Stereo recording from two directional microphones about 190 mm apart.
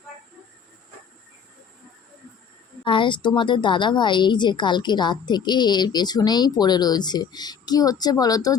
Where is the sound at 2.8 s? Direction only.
25° left (ahead or behind).